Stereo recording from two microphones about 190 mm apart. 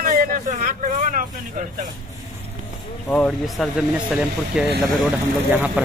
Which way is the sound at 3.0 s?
5° left (ahead or behind).